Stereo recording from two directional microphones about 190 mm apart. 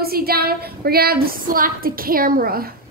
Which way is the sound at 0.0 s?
55° right (ahead or behind).